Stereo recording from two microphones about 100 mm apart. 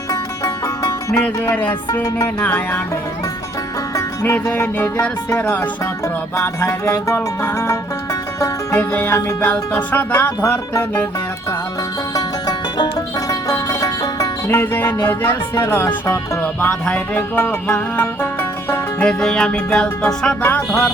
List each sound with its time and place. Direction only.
0.1 s music: 30° left (ahead or behind)
1.2 s music: 15° left (ahead or behind)
3.9 s music: 25° left (ahead or behind)
8.8 s music: 20° left (ahead or behind)
12.1 s music: 40° left (ahead or behind)
14.5 s music: 25° left (ahead or behind)
16.4 s music: 15° left (ahead or behind)
18.0 s music: 25° left (ahead or behind)
19.0 s music: 5° left (ahead or behind)
20.4 s music: 25° left (ahead or behind)